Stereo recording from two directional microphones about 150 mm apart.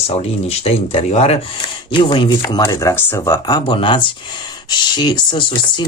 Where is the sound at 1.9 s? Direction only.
35° left (ahead or behind).